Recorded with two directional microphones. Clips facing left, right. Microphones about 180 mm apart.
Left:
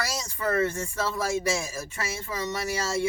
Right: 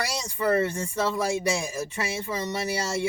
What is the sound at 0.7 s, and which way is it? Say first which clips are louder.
Speech: right 3 dB; 15° right (ahead or behind).